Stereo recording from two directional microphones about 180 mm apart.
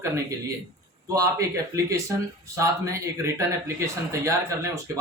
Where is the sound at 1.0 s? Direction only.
20° right (ahead or behind).